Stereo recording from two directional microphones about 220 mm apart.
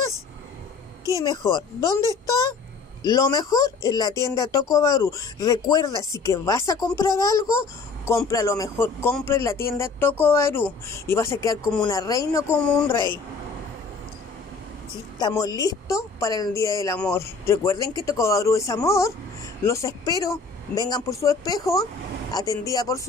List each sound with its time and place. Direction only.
1.2 s speech: 20° left (ahead or behind)
15.1 s speech: 15° left (ahead or behind)